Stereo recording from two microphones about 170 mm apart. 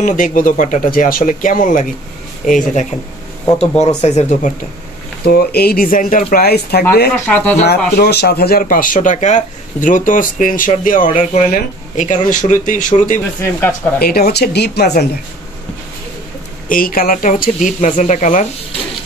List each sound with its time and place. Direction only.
0.0 s speech: 50° left (ahead or behind)
5.2 s speech: 65° left (ahead or behind)
7.2 s speech: 10° left (ahead or behind)
7.6 s speech: 70° left (ahead or behind); by 13.2 s 50° left (ahead or behind)
13.4 s speech: 15° left (ahead or behind)
13.9 s speech: 65° left (ahead or behind)
16.6 s speech: 55° left (ahead or behind)